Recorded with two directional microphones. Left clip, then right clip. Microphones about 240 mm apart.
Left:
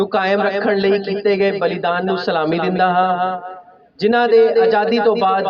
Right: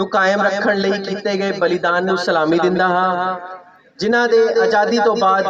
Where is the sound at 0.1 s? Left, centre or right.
Left.